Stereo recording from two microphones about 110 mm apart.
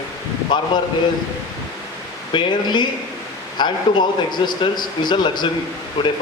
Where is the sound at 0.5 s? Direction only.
45° left (ahead or behind).